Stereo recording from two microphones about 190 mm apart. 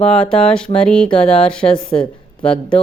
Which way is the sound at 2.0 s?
5° left (ahead or behind).